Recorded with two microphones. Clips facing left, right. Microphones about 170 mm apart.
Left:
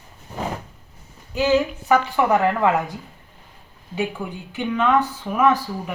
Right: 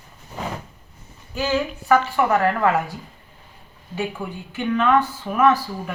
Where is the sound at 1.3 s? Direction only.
15° left (ahead or behind).